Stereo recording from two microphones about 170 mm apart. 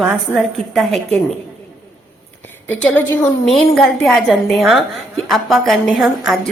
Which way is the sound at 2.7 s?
10° left (ahead or behind).